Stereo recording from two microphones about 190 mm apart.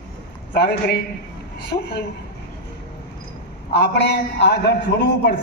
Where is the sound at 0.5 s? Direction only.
60° left (ahead or behind).